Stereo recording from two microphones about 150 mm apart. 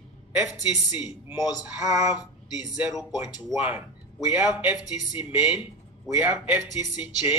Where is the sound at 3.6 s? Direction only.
10° right (ahead or behind).